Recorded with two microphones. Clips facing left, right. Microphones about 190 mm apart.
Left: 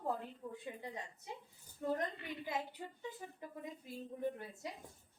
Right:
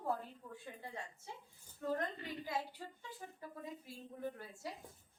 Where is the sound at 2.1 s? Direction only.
40° right (ahead or behind).